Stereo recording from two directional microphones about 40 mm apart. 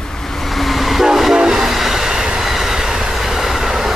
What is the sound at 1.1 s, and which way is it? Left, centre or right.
Train, centre.